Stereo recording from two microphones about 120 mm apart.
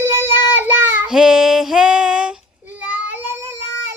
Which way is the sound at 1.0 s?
5° right (ahead or behind).